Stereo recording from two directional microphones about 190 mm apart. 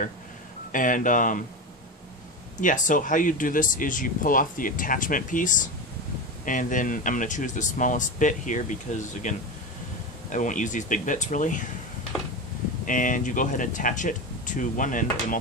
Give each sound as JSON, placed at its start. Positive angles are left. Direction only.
{"t": 0.7, "sound": "speech", "side_deg": 45}
{"t": 2.6, "sound": "speech", "side_deg": 45}
{"t": 10.3, "sound": "speech", "side_deg": 40}
{"t": 12.8, "sound": "speech", "side_deg": 45}